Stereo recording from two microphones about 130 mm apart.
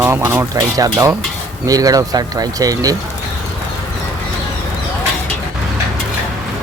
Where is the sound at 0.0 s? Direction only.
20° right (ahead or behind).